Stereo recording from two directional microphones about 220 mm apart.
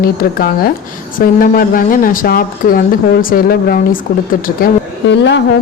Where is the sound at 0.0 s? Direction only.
45° left (ahead or behind).